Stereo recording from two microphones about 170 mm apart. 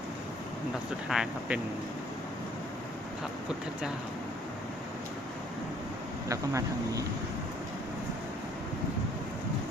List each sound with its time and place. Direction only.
1.1 s speech: 5° right (ahead or behind)
6.2 s speech: 20° right (ahead or behind)